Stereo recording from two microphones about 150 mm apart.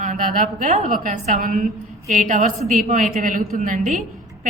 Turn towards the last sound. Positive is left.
turn(degrees=-55)  # may be behind; listen again after turning